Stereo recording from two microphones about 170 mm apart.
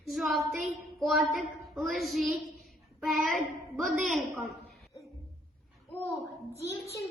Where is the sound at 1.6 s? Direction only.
Centre (ahead or behind).